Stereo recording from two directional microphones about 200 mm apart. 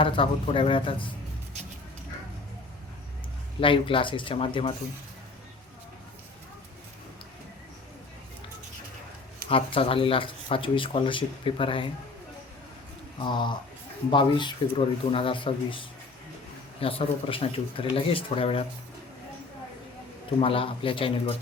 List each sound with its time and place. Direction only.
0.0 s speech: 25° left (ahead or behind)
3.6 s speech: 25° left (ahead or behind)
9.5 s speech: 30° left (ahead or behind)
13.1 s speech: 25° left (ahead or behind)
20.4 s speech: 25° left (ahead or behind)